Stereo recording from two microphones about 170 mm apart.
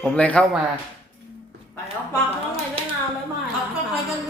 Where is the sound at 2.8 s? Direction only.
35° right (ahead or behind).